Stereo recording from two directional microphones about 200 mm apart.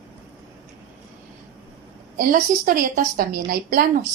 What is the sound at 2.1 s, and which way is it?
Speech, 45° right (ahead or behind).